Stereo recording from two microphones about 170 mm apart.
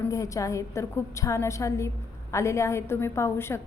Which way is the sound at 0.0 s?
20° left (ahead or behind).